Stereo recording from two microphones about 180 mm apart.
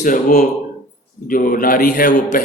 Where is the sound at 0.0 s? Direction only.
50° left (ahead or behind).